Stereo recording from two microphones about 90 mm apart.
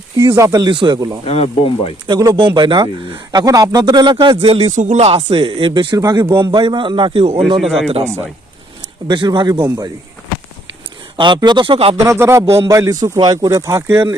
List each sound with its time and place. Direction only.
0.3 s a man's voice: 40° right (ahead or behind)
0.7 s speech: 65° right (ahead or behind)
0.9 s a man's voice: 40° right (ahead or behind)
1.2 s speech: 90° left
2.0 s speech: 50° right (ahead or behind)
3.4 s a man's voice: 45° right (ahead or behind)
6.3 s a man's voice: 60° right (ahead or behind); by 7.6 s 85° right
7.6 s speech: centre (ahead or behind)
8.0 s speech: 30° right (ahead or behind)
9.0 s speech: 60° right (ahead or behind)
11.2 s speech: 55° right (ahead or behind); by 11.9 s 80° right
12.0 s a man's voice: 30° right (ahead or behind)